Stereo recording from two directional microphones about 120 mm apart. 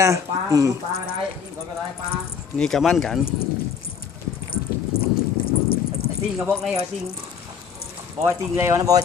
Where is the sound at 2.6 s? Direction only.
5° left (ahead or behind).